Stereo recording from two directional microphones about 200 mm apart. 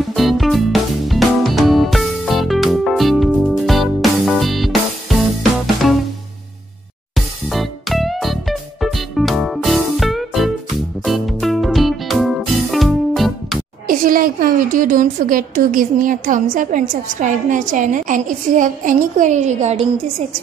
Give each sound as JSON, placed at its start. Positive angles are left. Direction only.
{"t": 0.1, "sound": "music", "side_deg": 0}
{"t": 7.2, "sound": "music", "side_deg": 0}
{"t": 13.8, "sound": "a woman's voice", "side_deg": -45}